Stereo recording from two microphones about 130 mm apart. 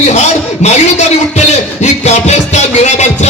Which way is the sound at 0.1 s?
60° left (ahead or behind).